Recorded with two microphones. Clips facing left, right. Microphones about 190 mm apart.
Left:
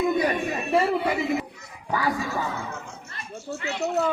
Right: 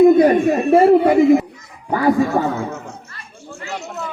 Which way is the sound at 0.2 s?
50° right (ahead or behind).